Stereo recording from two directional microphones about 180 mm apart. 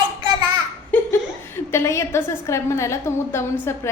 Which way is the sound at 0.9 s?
10° left (ahead or behind).